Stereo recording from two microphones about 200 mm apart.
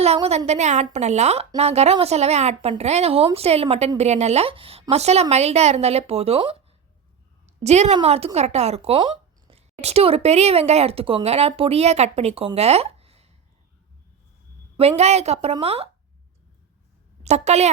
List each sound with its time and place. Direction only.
0.0 s a woman's voice: 30° right (ahead or behind)
14.8 s a woman's voice: 30° right (ahead or behind)
17.2 s a woman's voice: 35° right (ahead or behind)